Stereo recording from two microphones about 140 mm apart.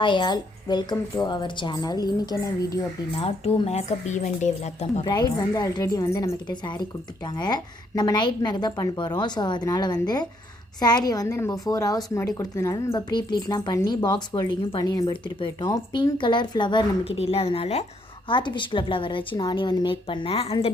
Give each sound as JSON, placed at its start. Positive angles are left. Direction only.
{"t": 0.0, "sound": "a woman's voice", "side_deg": 35}
{"t": 3.2, "sound": "speech", "side_deg": 45}
{"t": 5.0, "sound": "a woman's voice", "side_deg": 30}
{"t": 18.3, "sound": "a woman's voice", "side_deg": 35}